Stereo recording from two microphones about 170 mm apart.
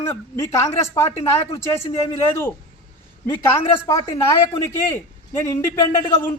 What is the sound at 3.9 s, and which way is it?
A man's voice, 15° left (ahead or behind).